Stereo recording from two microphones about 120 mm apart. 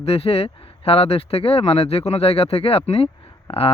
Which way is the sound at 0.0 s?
55° left (ahead or behind).